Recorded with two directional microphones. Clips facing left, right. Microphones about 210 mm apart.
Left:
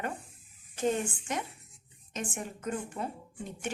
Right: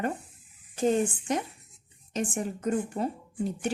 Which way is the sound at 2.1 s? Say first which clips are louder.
Right 7 dB; 35° right (ahead or behind).